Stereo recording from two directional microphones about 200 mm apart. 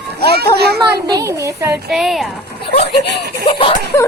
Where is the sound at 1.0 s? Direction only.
15° right (ahead or behind); by 2.2 s centre (ahead or behind).